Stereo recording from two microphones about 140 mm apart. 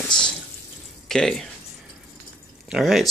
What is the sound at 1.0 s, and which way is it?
Speech, 5° left (ahead or behind).